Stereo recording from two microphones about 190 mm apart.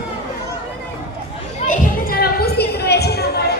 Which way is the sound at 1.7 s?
50° left (ahead or behind).